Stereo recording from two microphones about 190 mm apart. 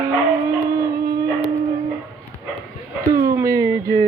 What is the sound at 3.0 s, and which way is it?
Speech, 20° right (ahead or behind).